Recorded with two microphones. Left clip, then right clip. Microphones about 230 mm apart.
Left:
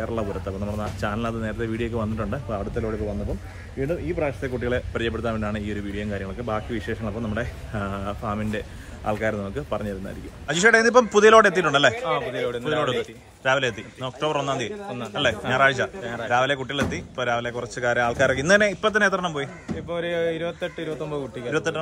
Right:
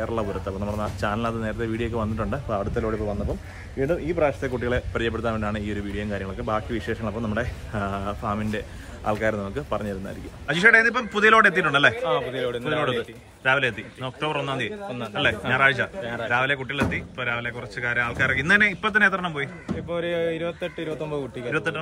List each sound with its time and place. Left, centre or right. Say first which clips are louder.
0.0 s speech: right 1 dB; centre
10.4 s a man's voice: right 1 dB; centre